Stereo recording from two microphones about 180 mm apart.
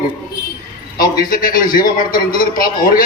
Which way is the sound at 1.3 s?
50° left (ahead or behind).